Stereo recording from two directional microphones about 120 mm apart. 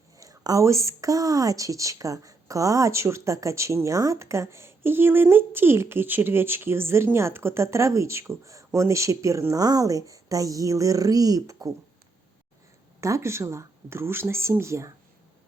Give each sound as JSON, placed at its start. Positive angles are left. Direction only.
{"t": 0.2, "sound": "speech", "side_deg": -30}
{"t": 13.0, "sound": "speech", "side_deg": -25}